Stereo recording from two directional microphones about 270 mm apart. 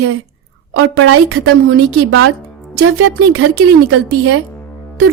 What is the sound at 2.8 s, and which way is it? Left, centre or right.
Speech, right.